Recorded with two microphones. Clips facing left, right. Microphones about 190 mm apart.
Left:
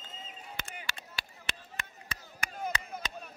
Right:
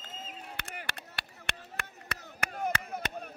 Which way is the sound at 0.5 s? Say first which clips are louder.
Left 1 dB; 60° right (ahead or behind).